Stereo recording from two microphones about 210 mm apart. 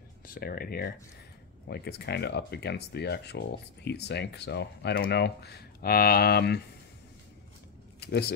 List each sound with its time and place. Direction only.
0.3 s speech: 45° left (ahead or behind)
8.0 s speech: 50° left (ahead or behind)